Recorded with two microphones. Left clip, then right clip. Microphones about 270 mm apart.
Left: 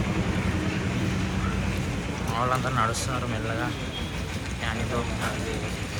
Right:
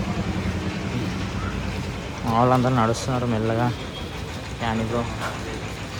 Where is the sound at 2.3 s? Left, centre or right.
Right.